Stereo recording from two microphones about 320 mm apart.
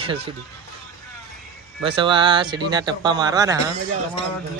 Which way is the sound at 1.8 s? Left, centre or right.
Centre.